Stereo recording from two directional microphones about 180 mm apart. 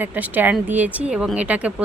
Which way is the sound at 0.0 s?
10° right (ahead or behind).